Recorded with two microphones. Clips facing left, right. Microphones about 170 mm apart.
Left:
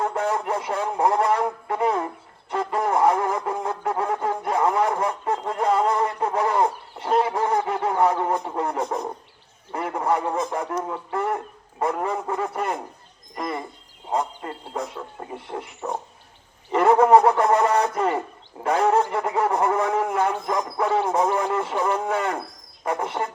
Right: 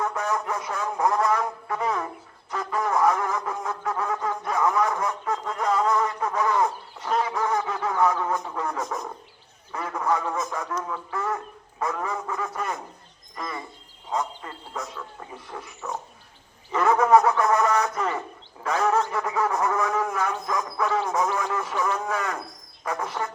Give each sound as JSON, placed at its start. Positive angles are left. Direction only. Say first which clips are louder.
{"t": 0.0, "sound": "a man's voice", "louder": "left 3 dB", "side_deg": 30}